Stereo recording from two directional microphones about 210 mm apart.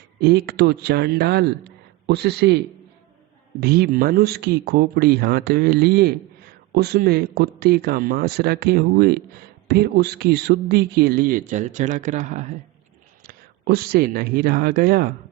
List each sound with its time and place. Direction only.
0.2 s speech: 50° right (ahead or behind)
3.6 s speech: 45° right (ahead or behind)
13.2 s speech: 45° right (ahead or behind)